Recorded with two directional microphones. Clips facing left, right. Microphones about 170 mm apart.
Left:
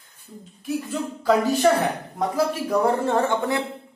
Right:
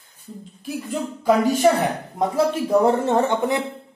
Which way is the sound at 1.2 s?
10° right (ahead or behind).